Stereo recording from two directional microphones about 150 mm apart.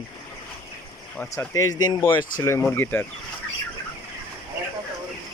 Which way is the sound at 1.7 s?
30° left (ahead or behind).